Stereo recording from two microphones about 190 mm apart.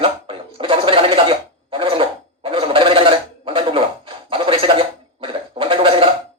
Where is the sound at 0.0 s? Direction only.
30° right (ahead or behind).